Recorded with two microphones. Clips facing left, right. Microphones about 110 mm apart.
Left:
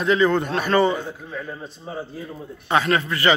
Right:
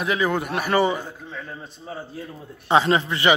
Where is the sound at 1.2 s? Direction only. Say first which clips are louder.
Left 3 dB; 5° left (ahead or behind).